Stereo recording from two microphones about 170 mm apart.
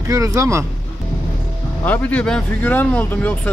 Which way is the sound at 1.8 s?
10° left (ahead or behind).